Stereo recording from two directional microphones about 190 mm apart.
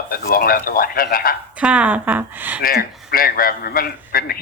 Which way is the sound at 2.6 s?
50° left (ahead or behind).